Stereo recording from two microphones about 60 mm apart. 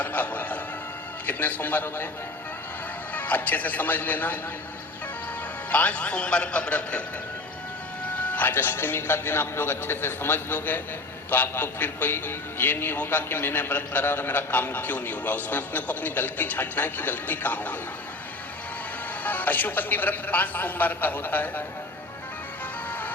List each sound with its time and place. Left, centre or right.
0.0 s music: left
1.3 s a man's voice: left
3.2 s a man's voice: left
5.7 s a man's voice: left
8.2 s a man's voice: left
19.2 s a man's voice: left
22.9 s music: left